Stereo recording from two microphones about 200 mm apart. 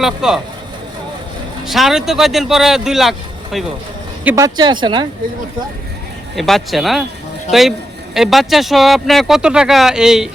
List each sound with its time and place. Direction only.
0.0 s speech: centre (ahead or behind)
1.6 s speech: centre (ahead or behind)
4.2 s speech: 10° right (ahead or behind)
6.3 s speech: centre (ahead or behind)
8.1 s speech: centre (ahead or behind)